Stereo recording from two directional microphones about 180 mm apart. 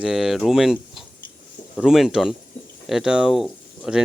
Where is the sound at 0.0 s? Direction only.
Centre (ahead or behind).